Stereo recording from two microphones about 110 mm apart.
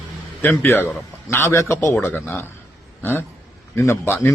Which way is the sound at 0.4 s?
20° left (ahead or behind).